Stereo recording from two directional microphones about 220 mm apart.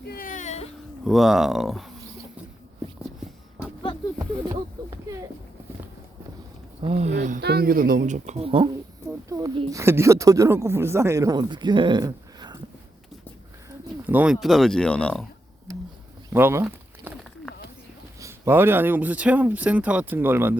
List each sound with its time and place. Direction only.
0.1 s a sound: 40° left (ahead or behind)
1.0 s speech: centre (ahead or behind)
6.8 s speech: 30° right (ahead or behind)
7.3 s a woman's voice: 45° right (ahead or behind); by 12.5 s 20° right (ahead or behind)
14.0 s speech: 5° right (ahead or behind)
16.3 s a sound: 10° right (ahead or behind)
18.2 s a woman's voice: 10° right (ahead or behind)